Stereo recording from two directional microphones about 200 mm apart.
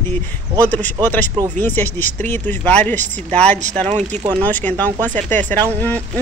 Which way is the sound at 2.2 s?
10° left (ahead or behind).